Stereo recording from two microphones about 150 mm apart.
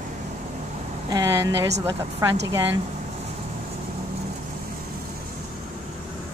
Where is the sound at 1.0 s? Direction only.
25° right (ahead or behind).